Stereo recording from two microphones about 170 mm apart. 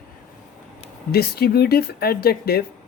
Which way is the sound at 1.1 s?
70° left (ahead or behind).